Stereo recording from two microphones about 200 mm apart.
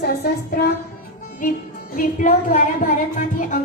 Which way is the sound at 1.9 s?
40° left (ahead or behind).